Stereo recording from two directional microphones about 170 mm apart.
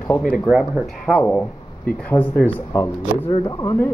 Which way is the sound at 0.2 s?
5° right (ahead or behind).